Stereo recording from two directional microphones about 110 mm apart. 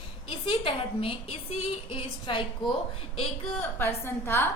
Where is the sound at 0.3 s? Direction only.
55° left (ahead or behind).